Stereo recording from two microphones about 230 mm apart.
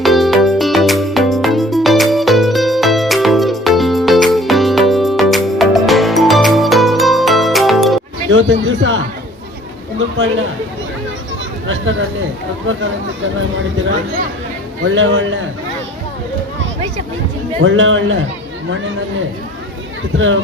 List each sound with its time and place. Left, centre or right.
0.0 s music: centre
8.3 s chatter: right
12.6 s speech: right
14.8 s speech: right
17.6 s speech: right
20.1 s speech: right